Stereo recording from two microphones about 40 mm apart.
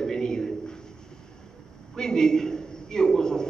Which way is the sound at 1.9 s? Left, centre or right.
Centre.